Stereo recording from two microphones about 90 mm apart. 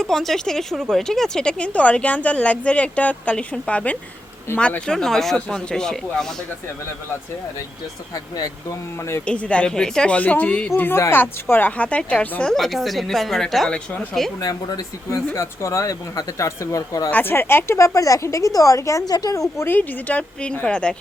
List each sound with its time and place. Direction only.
0.0 s speech: 5° left (ahead or behind)
9.2 s speech: 10° left (ahead or behind)
10.8 s speech: 25° left (ahead or behind); by 14.0 s 10° left (ahead or behind)
14.4 s speech: 40° left (ahead or behind)
15.3 s speech: 30° left (ahead or behind)
17.1 s speech: 20° left (ahead or behind); by 19.6 s 40° left (ahead or behind)
19.6 s speech: 20° left (ahead or behind)